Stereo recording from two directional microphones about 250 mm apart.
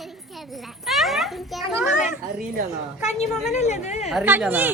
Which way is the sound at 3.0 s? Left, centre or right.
Left.